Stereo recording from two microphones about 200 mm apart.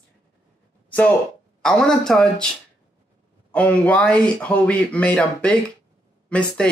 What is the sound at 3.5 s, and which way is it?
Speech, 5° left (ahead or behind).